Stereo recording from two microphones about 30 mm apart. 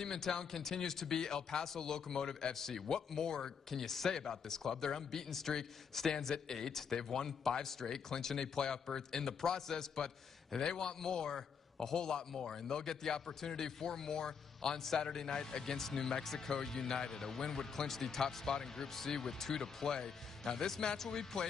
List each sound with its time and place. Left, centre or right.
0.0 s a man's voice: centre